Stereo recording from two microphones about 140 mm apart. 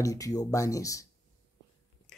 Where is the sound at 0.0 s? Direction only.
25° left (ahead or behind).